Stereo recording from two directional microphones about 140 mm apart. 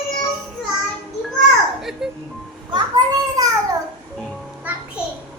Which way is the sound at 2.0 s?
5° right (ahead or behind).